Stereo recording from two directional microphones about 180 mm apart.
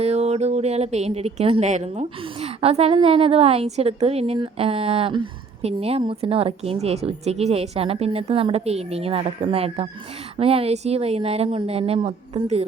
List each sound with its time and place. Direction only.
0.0 s speech: 35° right (ahead or behind)